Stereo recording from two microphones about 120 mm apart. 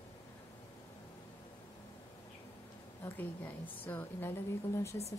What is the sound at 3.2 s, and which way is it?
A woman's voice, 15° left (ahead or behind).